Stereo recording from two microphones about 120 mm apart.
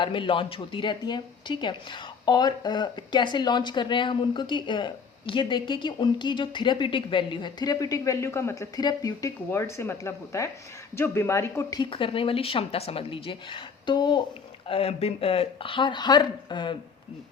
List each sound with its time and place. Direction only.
0.0 s a woman's voice: 45° left (ahead or behind); by 11.8 s 20° left (ahead or behind)
11.8 s speech: 50° left (ahead or behind)
14.7 s speech: 55° left (ahead or behind); by 16.7 s 40° left (ahead or behind)